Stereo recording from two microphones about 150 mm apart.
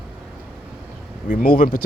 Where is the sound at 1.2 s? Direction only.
60° left (ahead or behind).